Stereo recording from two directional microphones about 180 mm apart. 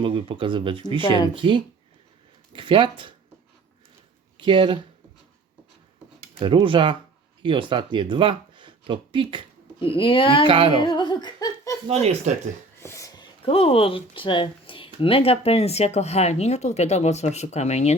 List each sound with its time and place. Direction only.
0.0 s speech: 30° right (ahead or behind)
1.0 s speech: 25° left (ahead or behind)
1.3 s speech: 25° right (ahead or behind)
4.4 s speech: 25° right (ahead or behind)
6.4 s speech: 30° right (ahead or behind)
9.8 s speech: 30° left (ahead or behind)
10.4 s speech: 30° right (ahead or behind)
10.8 s giggle: 25° left (ahead or behind)
11.9 s speech: 35° right (ahead or behind)
12.8 s a sound: 15° left (ahead or behind)
13.4 s speech: 30° left (ahead or behind)